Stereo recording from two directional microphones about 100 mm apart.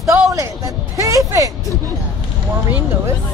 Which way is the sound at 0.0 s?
35° right (ahead or behind).